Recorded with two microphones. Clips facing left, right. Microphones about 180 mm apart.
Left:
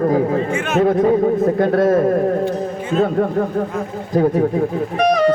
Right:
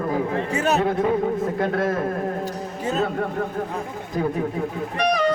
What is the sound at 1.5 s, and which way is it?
Speech, 40° left (ahead or behind).